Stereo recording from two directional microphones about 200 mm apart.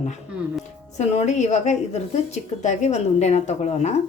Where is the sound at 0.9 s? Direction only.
35° left (ahead or behind).